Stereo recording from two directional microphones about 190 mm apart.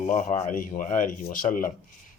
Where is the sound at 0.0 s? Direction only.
40° left (ahead or behind).